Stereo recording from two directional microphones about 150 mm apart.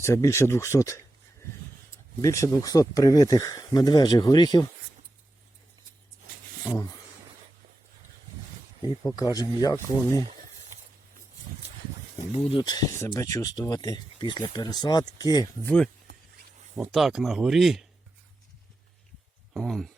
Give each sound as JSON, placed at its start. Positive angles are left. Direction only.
{"t": 0.0, "sound": "speech", "side_deg": 20}
{"t": 2.2, "sound": "speech", "side_deg": 20}
{"t": 6.7, "sound": "speech", "side_deg": 25}
{"t": 8.8, "sound": "speech", "side_deg": 25}
{"t": 12.3, "sound": "speech", "side_deg": 40}
{"t": 12.6, "sound": "speech", "side_deg": 25}
{"t": 15.6, "sound": "speech", "side_deg": 5}
{"t": 19.5, "sound": "speech", "side_deg": 0}